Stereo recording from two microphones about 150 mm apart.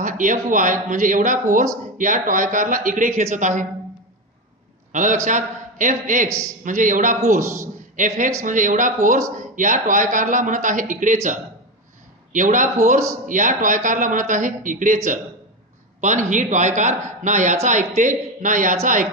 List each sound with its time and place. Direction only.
0.0 s a man's voice: 60° right (ahead or behind)
4.9 s a man's voice: 55° right (ahead or behind)
12.3 s a man's voice: 60° right (ahead or behind)